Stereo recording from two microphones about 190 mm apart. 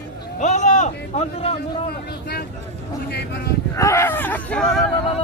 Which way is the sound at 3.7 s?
15° left (ahead or behind).